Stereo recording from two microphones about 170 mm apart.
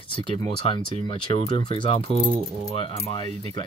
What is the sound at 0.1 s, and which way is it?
Speech, 30° left (ahead or behind).